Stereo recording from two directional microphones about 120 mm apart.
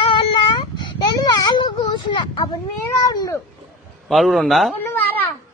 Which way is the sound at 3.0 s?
25° left (ahead or behind).